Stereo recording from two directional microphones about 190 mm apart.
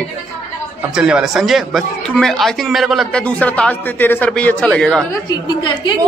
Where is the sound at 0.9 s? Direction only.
5° right (ahead or behind).